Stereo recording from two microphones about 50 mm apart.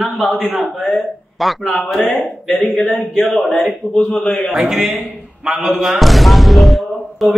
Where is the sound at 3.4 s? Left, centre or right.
Centre.